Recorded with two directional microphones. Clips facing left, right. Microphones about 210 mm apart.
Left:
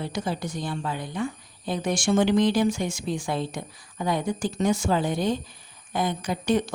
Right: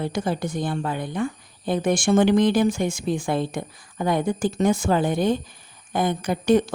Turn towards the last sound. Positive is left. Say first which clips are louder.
# right 5 dB
turn(degrees=-50)  # may be behind; listen again after turning